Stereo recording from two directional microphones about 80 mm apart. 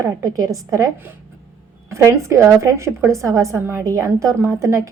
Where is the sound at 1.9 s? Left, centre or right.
Right.